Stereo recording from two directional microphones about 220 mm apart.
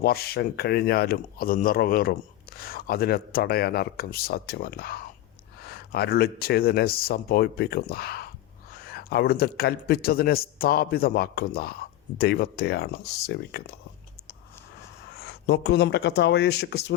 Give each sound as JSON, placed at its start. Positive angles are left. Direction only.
{"t": 0.0, "sound": "speech", "side_deg": 45}
{"t": 15.1, "sound": "speech", "side_deg": 50}